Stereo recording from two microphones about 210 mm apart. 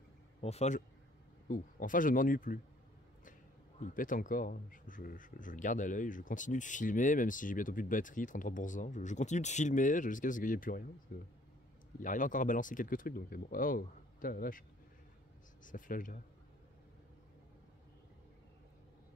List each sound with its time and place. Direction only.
0.4 s speech: 30° left (ahead or behind)
3.8 s speech: 40° left (ahead or behind)
15.6 s speech: 40° left (ahead or behind)